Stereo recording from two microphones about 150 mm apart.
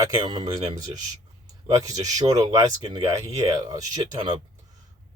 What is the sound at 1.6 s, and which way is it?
Speech, 25° right (ahead or behind).